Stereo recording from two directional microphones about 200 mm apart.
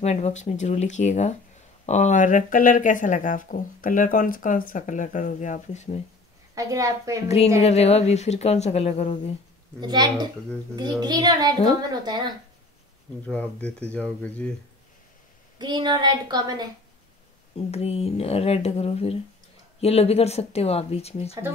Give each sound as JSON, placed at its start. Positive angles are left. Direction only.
{"t": 0.0, "sound": "speech", "side_deg": 35}
{"t": 6.5, "sound": "a woman's voice", "side_deg": -15}
{"t": 7.2, "sound": "speech", "side_deg": 30}
{"t": 9.8, "sound": "speech", "side_deg": -20}
{"t": 13.3, "sound": "speech", "side_deg": 5}
{"t": 15.6, "sound": "speech", "side_deg": -20}
{"t": 17.6, "sound": "speech", "side_deg": 30}